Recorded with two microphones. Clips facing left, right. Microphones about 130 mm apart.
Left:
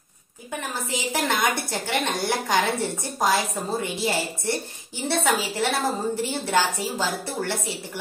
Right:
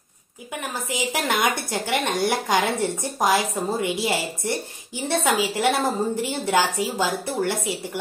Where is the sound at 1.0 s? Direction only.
15° right (ahead or behind).